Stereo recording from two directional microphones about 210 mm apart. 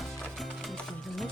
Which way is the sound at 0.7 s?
Centre (ahead or behind).